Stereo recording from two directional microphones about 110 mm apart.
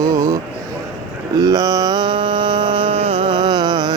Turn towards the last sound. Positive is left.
turn(degrees=-40)  # may be behind; listen again after turning